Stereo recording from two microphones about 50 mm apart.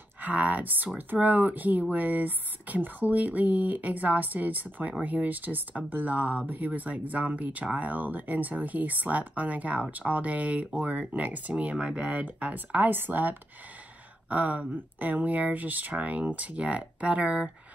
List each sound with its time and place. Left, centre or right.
0.2 s speech: right